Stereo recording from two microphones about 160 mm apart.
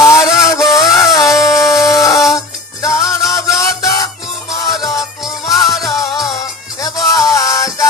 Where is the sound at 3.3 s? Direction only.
20° left (ahead or behind).